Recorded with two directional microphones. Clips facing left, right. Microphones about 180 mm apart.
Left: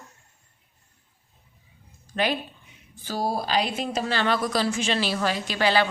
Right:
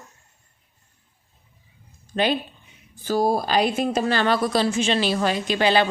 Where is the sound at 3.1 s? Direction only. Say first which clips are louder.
Right 6 dB; 50° right (ahead or behind).